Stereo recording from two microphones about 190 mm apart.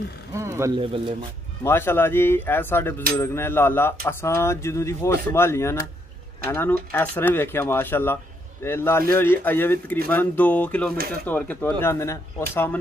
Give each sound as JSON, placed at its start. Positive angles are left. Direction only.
{"t": 0.3, "sound": "speech", "side_deg": -15}
{"t": 1.6, "sound": "speech", "side_deg": 10}